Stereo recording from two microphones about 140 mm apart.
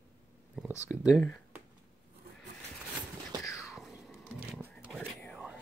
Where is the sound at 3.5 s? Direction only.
Centre (ahead or behind).